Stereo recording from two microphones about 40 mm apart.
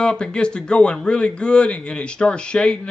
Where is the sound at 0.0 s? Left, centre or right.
Left.